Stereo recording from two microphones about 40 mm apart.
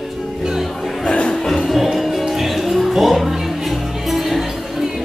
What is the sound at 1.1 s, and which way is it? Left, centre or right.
Music, centre.